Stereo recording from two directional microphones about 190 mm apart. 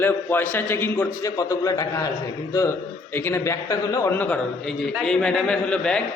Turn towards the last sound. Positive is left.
turn(degrees=5)  # may be behind; listen again after turning